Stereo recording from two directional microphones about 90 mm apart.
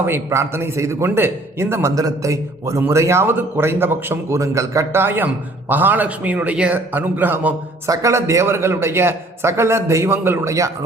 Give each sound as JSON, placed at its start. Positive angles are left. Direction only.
{"t": 0.0, "sound": "a man's voice", "side_deg": -30}
{"t": 2.0, "sound": "a man's voice", "side_deg": -40}
{"t": 4.4, "sound": "a man's voice", "side_deg": -35}
{"t": 7.9, "sound": "a man's voice", "side_deg": -35}